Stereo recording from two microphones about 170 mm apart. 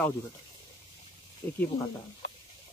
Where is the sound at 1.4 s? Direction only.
15° left (ahead or behind).